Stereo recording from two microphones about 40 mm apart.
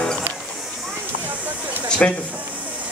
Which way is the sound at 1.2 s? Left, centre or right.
Right.